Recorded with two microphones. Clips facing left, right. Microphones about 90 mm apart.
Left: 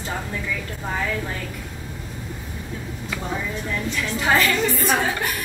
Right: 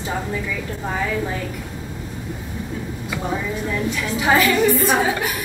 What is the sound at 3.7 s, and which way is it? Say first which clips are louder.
A woman's voice: right 2 dB; 5° right (ahead or behind).